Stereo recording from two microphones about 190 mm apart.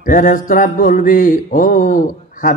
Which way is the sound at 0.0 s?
45° left (ahead or behind).